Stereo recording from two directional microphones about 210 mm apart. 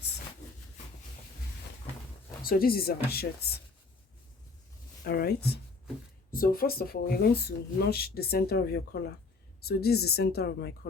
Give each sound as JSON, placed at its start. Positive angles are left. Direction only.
{"t": 2.4, "sound": "speech", "side_deg": 45}
{"t": 5.0, "sound": "speech", "side_deg": 45}